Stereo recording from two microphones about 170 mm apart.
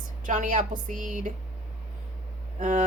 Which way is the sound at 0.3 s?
50° right (ahead or behind).